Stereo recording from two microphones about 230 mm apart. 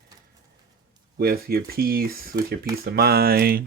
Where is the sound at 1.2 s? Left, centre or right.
Right.